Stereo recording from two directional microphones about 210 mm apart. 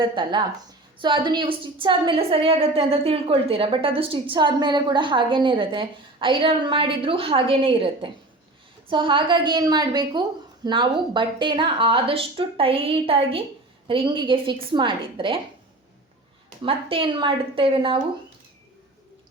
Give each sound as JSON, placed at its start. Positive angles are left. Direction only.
{"t": 0.0, "sound": "a woman's voice", "side_deg": -20}
{"t": 16.6, "sound": "a woman's voice", "side_deg": -25}